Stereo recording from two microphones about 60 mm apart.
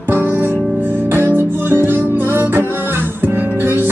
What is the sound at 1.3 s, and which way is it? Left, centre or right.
Music, right.